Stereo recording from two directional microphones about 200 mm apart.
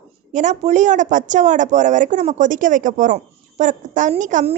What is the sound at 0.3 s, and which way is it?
A woman's voice, 35° right (ahead or behind).